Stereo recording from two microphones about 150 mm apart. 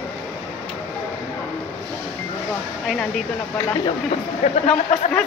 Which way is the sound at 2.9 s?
5° left (ahead or behind).